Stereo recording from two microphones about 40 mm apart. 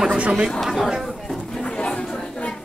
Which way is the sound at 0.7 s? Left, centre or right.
Centre.